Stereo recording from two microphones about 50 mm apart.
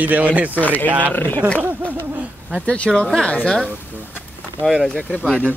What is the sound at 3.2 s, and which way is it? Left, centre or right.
Speech, centre.